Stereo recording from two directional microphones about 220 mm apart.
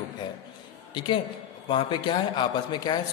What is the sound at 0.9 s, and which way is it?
Speech, 20° left (ahead or behind).